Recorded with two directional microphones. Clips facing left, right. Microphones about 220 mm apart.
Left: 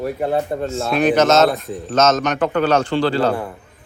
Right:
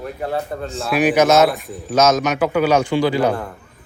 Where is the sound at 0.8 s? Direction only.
10° right (ahead or behind).